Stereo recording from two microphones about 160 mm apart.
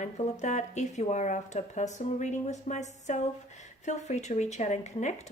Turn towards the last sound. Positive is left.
turn(degrees=45)  # may be behind; listen again after turning